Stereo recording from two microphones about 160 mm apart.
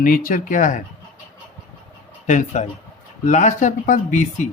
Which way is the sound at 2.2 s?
50° left (ahead or behind).